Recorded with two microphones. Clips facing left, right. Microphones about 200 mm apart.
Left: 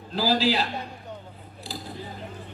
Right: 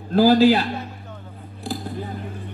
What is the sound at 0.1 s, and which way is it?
Speech, 55° right (ahead or behind).